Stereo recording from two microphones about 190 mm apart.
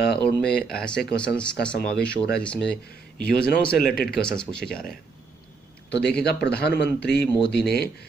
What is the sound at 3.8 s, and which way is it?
Speech, 50° left (ahead or behind).